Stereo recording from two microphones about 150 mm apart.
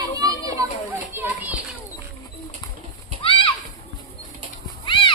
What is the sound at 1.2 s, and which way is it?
Children playing, 15° right (ahead or behind).